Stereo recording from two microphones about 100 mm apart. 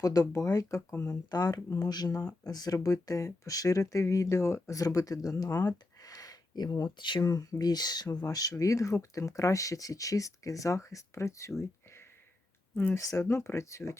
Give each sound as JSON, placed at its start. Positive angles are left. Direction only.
{"t": 0.0, "sound": "speech", "side_deg": 35}
{"t": 1.3, "sound": "speech", "side_deg": 40}
{"t": 5.6, "sound": "a sound", "side_deg": 40}
{"t": 7.2, "sound": "speech", "side_deg": 30}
{"t": 12.9, "sound": "speech", "side_deg": 30}